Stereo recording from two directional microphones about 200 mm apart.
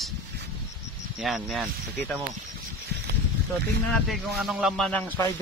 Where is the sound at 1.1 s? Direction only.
Centre (ahead or behind).